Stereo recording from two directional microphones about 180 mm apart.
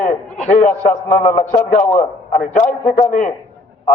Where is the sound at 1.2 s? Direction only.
35° left (ahead or behind).